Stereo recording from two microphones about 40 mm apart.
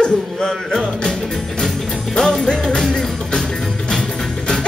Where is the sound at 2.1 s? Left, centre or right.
Centre.